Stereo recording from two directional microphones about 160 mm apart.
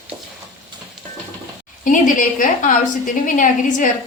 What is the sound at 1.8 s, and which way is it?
A woman's voice, 55° left (ahead or behind).